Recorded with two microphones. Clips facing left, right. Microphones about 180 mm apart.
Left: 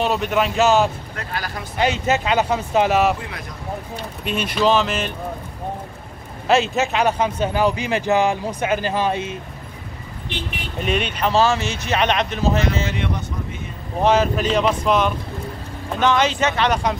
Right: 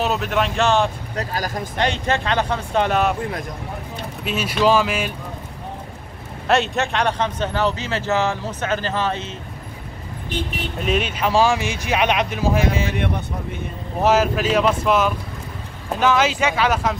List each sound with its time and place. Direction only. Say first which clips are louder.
0.0 s speech: left 1 dB; centre (ahead or behind)
1.1 s speech: right 4 dB; 40° right (ahead or behind)
1.8 s speech: left 2 dB; 5° left (ahead or behind)
4.2 s speech: even; 5° right (ahead or behind)
6.4 s a man's voice: left 1 dB; centre (ahead or behind)
10.8 s speech: even; centre (ahead or behind)
14.0 s speech: even; 5° right (ahead or behind)